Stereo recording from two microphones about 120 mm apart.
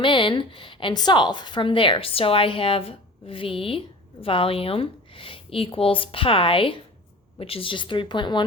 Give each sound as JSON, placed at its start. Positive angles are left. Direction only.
{"t": 0.0, "sound": "a woman's voice", "side_deg": 45}